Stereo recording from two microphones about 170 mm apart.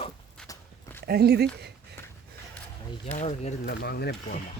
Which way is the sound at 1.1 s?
70° right (ahead or behind).